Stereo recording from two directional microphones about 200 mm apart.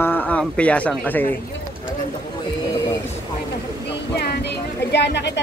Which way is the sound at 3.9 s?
55° left (ahead or behind).